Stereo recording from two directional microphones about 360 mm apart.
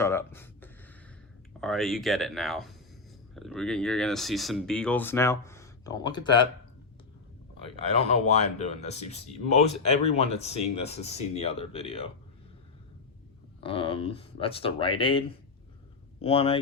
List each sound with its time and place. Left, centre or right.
0.0 s a sound: centre
1.6 s speech: centre
7.9 s speech: centre
13.6 s speech: centre
16.2 s speech: centre